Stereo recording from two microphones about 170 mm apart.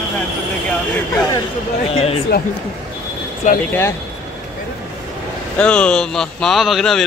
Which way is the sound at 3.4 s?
50° left (ahead or behind).